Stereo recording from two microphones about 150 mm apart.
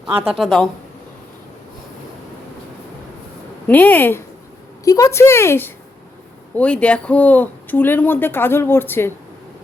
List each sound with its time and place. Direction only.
0.3 s speech: centre (ahead or behind)
3.7 s speech: 10° left (ahead or behind)